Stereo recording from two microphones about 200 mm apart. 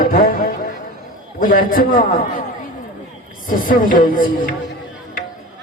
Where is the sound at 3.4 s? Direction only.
45° left (ahead or behind).